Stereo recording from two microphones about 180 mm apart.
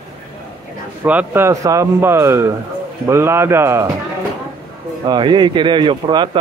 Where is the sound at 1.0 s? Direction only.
10° right (ahead or behind).